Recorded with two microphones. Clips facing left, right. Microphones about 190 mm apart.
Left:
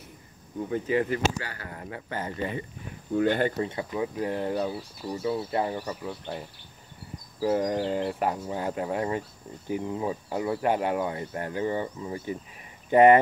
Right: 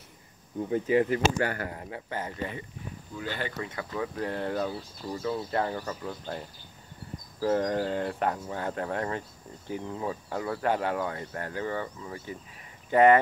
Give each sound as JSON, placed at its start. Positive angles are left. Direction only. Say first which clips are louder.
{"t": 0.7, "sound": "speech", "louder": "right 2 dB", "side_deg": -20}
{"t": 1.4, "sound": "speech", "louder": "right 10 dB", "side_deg": -50}
{"t": 1.8, "sound": "speech", "louder": "left 1 dB", "side_deg": -20}
{"t": 3.1, "sound": "speech", "louder": "left 11 dB", "side_deg": 55}
{"t": 3.5, "sound": "speech", "louder": "left 6 dB", "side_deg": 30}
{"t": 3.9, "sound": "speech", "louder": "even", "side_deg": 15}
{"t": 7.3, "sound": "speech", "louder": "left 1 dB", "side_deg": 10}